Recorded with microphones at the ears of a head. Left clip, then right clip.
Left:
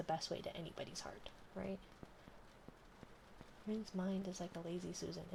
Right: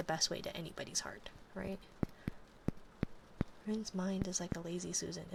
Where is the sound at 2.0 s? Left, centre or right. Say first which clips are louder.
Right 14 dB; right.